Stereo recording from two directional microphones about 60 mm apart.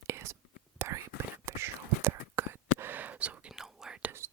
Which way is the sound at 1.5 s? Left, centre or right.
Right.